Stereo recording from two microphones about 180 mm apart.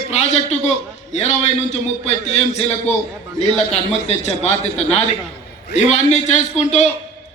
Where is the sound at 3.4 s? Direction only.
35° left (ahead or behind).